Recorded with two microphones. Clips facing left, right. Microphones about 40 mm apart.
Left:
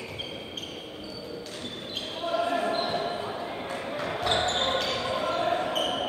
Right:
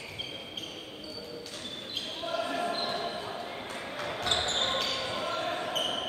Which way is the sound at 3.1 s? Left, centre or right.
Left.